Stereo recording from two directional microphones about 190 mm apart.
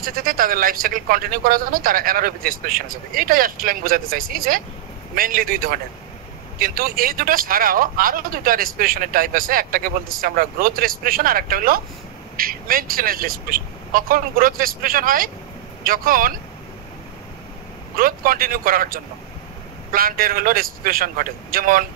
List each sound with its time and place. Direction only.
0.0 s speech: 50° right (ahead or behind)
17.9 s speech: 50° right (ahead or behind)